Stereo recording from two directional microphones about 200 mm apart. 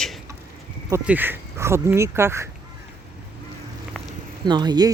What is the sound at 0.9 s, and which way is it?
Speech, 10° right (ahead or behind).